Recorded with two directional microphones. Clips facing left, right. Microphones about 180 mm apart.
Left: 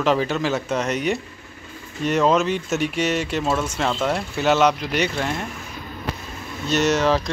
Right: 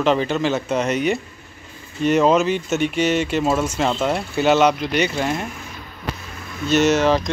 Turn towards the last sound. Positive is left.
turn(degrees=0)  # may be behind; listen again after turning